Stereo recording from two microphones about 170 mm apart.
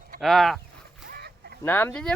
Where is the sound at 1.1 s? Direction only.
70° right (ahead or behind).